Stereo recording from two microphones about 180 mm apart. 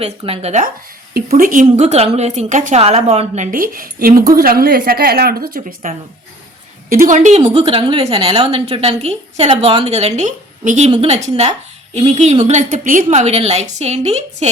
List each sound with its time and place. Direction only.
0.0 s a woman's voice: 35° right (ahead or behind)
1.3 s a woman's voice: 50° right (ahead or behind)
6.9 s a woman's voice: 45° right (ahead or behind)
7.4 s a woman's voice: 30° right (ahead or behind)